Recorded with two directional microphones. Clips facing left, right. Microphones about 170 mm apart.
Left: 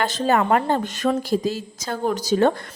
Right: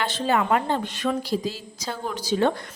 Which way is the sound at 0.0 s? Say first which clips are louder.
Left 3 dB; 40° left (ahead or behind).